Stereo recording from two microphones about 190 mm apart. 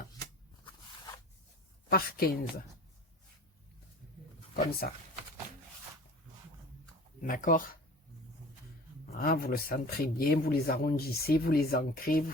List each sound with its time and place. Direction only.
1.9 s speech: 50° left (ahead or behind)
4.5 s speech: 45° left (ahead or behind)
7.3 s speech: 45° left (ahead or behind)
9.0 s speech: 50° left (ahead or behind)